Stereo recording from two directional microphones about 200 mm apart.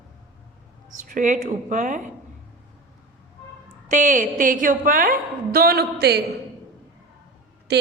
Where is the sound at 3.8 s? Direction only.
40° right (ahead or behind).